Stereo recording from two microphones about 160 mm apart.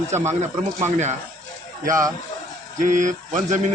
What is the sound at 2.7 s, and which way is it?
Speech, 50° right (ahead or behind).